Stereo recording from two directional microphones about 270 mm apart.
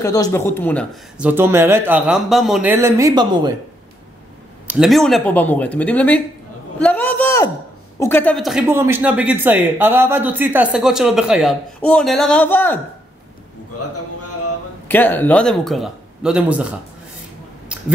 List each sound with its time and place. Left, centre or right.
0.0 s speech: centre
4.6 s a man's voice: centre
14.9 s speech: centre
17.7 s a sound: centre